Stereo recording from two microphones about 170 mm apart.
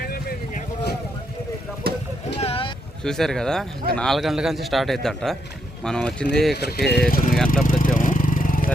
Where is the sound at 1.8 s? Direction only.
65° right (ahead or behind).